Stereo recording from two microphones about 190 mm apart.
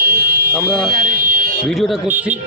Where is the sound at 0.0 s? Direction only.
55° right (ahead or behind).